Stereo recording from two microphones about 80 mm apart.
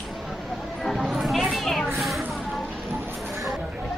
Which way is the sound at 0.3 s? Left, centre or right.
Centre.